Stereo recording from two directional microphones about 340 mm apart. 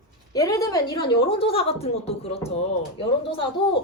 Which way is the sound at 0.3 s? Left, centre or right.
Centre.